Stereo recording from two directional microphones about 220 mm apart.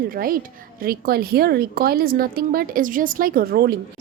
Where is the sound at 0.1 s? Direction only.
40° right (ahead or behind).